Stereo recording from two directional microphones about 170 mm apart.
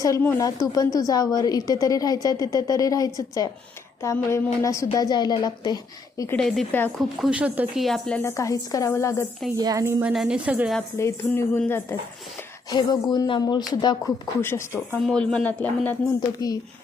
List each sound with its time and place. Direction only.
0.0 s a woman's voice: 15° left (ahead or behind)
6.3 s a woman's voice: 5° left (ahead or behind)
7.2 s speech: 5° right (ahead or behind)
7.9 s a woman's voice: 5° left (ahead or behind)
9.6 s speech: 20° right (ahead or behind)
10.1 s a woman's voice: 5° right (ahead or behind)
10.9 s a woman's voice: 15° left (ahead or behind)
12.7 s a woman's voice: 25° left (ahead or behind)
15.0 s a woman's voice: 5° left (ahead or behind)
16.4 s a woman's voice: 25° left (ahead or behind)